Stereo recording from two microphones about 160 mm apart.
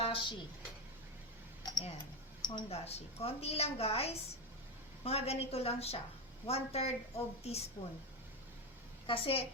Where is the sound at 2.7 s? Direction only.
40° left (ahead or behind).